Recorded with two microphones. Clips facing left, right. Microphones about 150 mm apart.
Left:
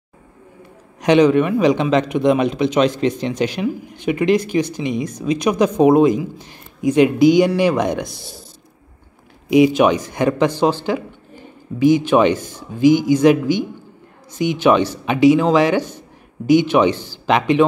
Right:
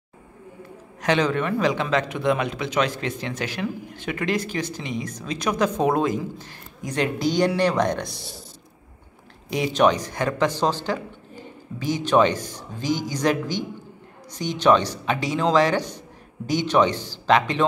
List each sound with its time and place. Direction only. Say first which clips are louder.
1.0 s speech: left 9 dB; 15° left (ahead or behind)
9.5 s speech: left 7 dB; 10° left (ahead or behind)
16.9 s speech: left 3 dB; 15° right (ahead or behind)
17.3 s speech: left 5 dB; 15° left (ahead or behind)